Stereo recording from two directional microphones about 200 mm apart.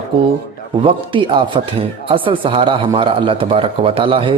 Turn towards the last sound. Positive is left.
turn(degrees=-25)  # may be behind; listen again after turning